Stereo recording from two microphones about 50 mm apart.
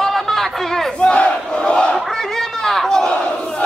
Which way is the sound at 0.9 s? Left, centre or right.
Left.